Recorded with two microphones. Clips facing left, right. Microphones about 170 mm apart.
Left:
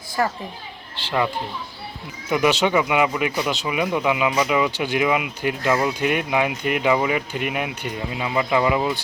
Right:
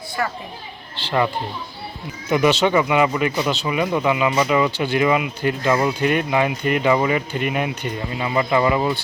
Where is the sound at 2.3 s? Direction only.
5° left (ahead or behind).